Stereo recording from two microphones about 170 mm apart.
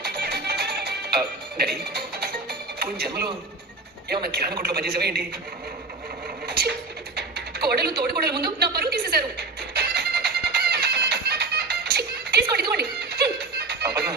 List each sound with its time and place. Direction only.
0.0 s music: 70° right (ahead or behind)
4.1 s a woman's voice: 65° right (ahead or behind)
6.5 s music: 70° right (ahead or behind)
7.2 s a sound: 75° right (ahead or behind)
8.0 s a woman's voice: 70° right (ahead or behind)
9.7 s music: 70° right (ahead or behind)